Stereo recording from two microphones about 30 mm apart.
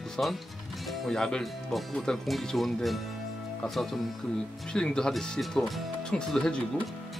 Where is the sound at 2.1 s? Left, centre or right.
Left.